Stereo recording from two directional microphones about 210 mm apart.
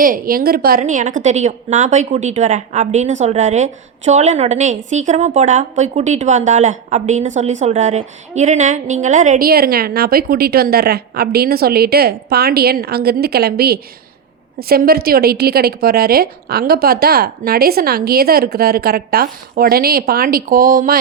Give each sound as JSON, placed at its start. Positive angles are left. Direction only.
{"t": 0.0, "sound": "a woman's voice", "side_deg": -40}